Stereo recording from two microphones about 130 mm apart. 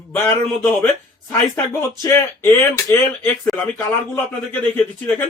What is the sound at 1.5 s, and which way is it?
Speech, 20° left (ahead or behind).